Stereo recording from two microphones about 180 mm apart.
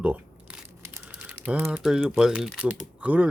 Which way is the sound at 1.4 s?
5° right (ahead or behind).